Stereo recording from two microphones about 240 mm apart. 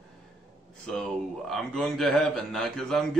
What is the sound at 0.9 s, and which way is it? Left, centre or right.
A man's voice, centre.